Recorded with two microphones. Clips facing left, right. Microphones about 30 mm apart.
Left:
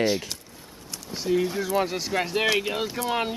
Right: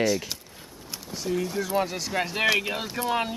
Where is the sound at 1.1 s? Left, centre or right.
Left.